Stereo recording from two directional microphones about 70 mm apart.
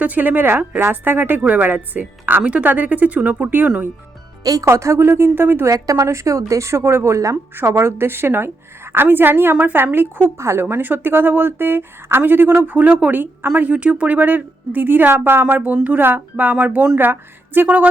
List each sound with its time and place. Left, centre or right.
0.0 s a woman's voice: right
4.6 s speech: right
5.6 s a woman's voice: right